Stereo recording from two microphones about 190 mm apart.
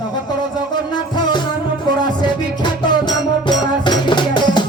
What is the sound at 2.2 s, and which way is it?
Music, 20° left (ahead or behind).